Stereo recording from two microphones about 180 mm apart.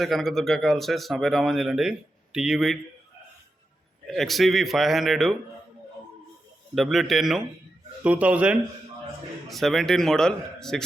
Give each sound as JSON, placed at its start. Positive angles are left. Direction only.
{"t": 0.0, "sound": "speech", "side_deg": 0}
{"t": 4.1, "sound": "speech", "side_deg": 0}
{"t": 6.7, "sound": "speech", "side_deg": 0}